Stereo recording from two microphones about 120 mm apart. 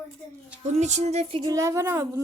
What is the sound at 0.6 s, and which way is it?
Speech, 70° right (ahead or behind).